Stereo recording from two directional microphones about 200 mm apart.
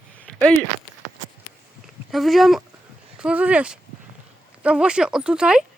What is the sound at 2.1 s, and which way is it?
Speech, centre (ahead or behind).